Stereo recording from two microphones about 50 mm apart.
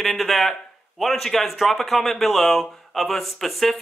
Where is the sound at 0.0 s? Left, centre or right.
Centre.